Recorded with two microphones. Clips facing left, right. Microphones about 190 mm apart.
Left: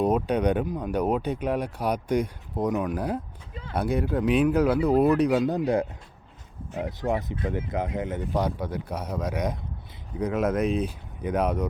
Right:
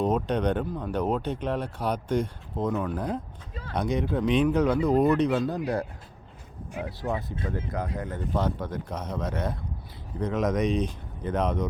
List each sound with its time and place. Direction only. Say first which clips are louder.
0.0 s speech: left 2 dB; 10° left (ahead or behind)